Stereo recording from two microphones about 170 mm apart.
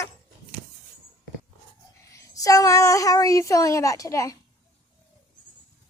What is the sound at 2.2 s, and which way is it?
Speech, 20° left (ahead or behind).